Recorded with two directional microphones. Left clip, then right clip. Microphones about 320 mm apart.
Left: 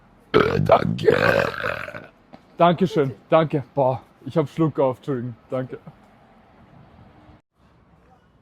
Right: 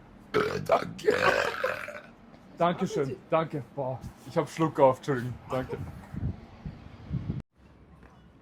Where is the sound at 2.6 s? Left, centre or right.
Left.